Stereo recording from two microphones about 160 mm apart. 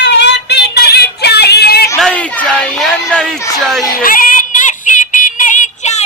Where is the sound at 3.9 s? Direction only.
60° left (ahead or behind).